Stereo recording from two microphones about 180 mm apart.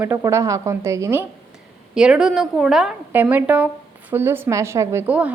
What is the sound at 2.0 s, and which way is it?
A woman's voice, 5° right (ahead or behind).